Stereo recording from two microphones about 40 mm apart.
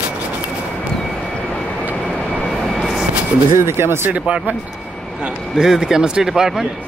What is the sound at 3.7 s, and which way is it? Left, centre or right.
Speech, right.